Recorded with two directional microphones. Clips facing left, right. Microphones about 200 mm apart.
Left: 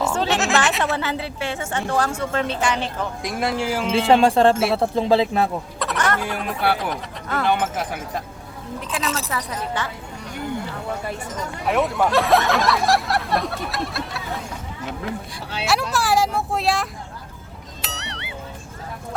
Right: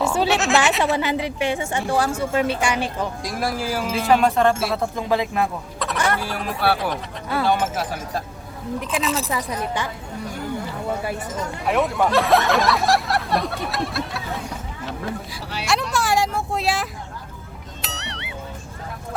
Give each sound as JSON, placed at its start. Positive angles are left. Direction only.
{"t": 0.1, "sound": "speech", "side_deg": -5}
{"t": 0.9, "sound": "a woman's voice", "side_deg": -15}
{"t": 3.2, "sound": "speech", "side_deg": 25}
{"t": 5.8, "sound": "a sound", "side_deg": 0}
{"t": 6.1, "sound": "a woman's voice", "side_deg": -5}
{"t": 7.8, "sound": "speech", "side_deg": 20}
{"t": 8.9, "sound": "speech", "side_deg": 0}
{"t": 9.3, "sound": "a woman's voice", "side_deg": -15}
{"t": 11.6, "sound": "speech", "side_deg": 0}
{"t": 15.6, "sound": "vehicle", "side_deg": 5}
{"t": 17.8, "sound": "music", "side_deg": 0}